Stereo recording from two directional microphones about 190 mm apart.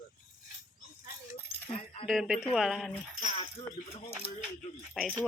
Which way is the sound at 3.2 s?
40° left (ahead or behind).